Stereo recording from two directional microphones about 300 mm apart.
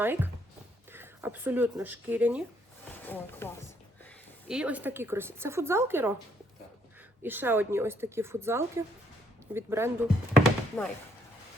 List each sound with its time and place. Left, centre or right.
0.0 s speech: centre
3.0 s speech: centre
4.4 s speech: centre
7.2 s speech: centre
10.8 s speech: centre